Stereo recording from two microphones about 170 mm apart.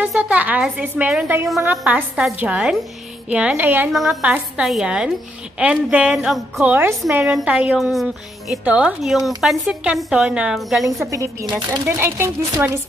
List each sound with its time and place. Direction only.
0.0 s a woman's voice: 10° right (ahead or behind)
6.6 s a woman's voice: 10° right (ahead or behind)
11.1 s speech: 20° right (ahead or behind)
12.0 s a woman's voice: 15° right (ahead or behind)